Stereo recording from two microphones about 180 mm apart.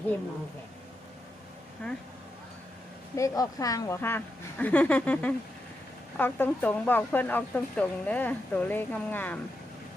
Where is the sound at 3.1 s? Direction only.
20° left (ahead or behind).